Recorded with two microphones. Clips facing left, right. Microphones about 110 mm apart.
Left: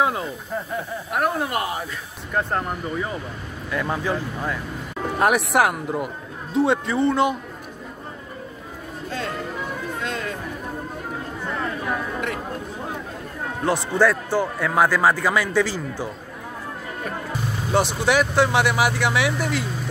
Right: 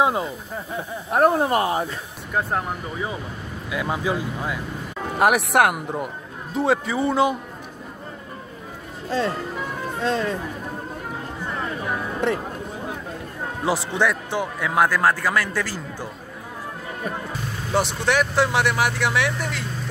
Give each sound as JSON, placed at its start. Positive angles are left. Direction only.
{"t": 0.0, "sound": "speech", "side_deg": -20}
{"t": 1.1, "sound": "speech", "side_deg": -30}
{"t": 2.3, "sound": "speech", "side_deg": -5}
{"t": 10.0, "sound": "speech", "side_deg": -30}
{"t": 13.9, "sound": "speech", "side_deg": 5}
{"t": 17.6, "sound": "speech", "side_deg": 5}